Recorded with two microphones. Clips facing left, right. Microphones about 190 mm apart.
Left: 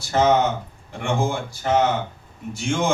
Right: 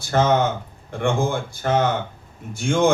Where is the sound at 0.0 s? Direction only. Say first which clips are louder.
Even; 55° right (ahead or behind).